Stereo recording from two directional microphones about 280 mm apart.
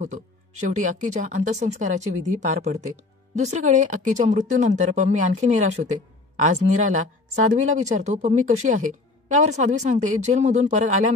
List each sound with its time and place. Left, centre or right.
0.0 s speech: right